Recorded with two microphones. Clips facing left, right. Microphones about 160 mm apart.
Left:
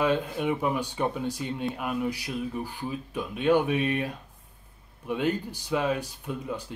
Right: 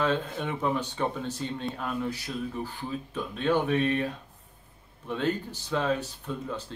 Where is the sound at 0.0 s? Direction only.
10° left (ahead or behind).